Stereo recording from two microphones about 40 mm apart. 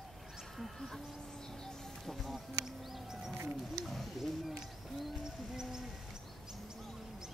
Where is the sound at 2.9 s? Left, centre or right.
Centre.